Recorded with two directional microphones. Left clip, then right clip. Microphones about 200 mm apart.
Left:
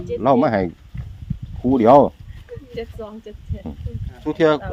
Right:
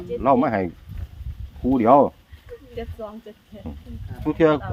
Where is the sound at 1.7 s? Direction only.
45° left (ahead or behind).